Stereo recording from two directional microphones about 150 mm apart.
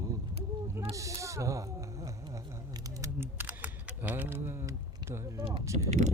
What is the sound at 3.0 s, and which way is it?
Camera, 15° right (ahead or behind).